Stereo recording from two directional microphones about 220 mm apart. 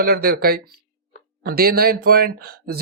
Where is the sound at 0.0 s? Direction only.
45° right (ahead or behind).